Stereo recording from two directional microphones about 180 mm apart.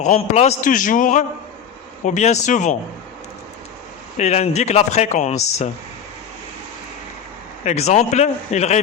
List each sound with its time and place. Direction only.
0.0 s a man's voice: 40° left (ahead or behind)
4.2 s speech: 35° left (ahead or behind)
7.6 s speech: 40° left (ahead or behind)